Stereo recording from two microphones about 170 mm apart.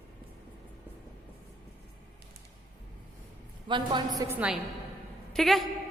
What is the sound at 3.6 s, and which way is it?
A woman's voice, 25° right (ahead or behind).